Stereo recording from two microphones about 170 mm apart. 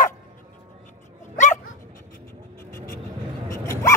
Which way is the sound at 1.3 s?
45° left (ahead or behind).